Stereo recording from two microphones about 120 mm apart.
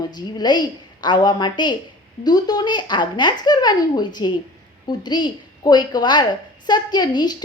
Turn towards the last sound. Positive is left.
turn(degrees=35)  # may be behind; listen again after turning